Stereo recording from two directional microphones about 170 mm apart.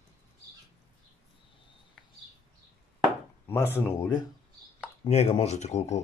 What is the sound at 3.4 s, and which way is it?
Speech, 15° left (ahead or behind).